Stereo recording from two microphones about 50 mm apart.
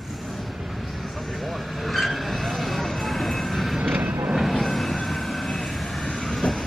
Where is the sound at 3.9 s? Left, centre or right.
Right.